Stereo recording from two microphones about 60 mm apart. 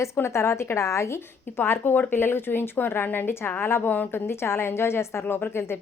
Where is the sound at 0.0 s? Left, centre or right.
Left.